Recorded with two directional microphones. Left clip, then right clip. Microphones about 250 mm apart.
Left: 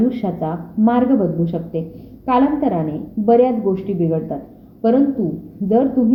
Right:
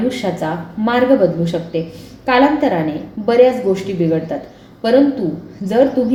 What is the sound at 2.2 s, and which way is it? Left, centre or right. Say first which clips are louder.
A woman's voice: right 4 dB; left.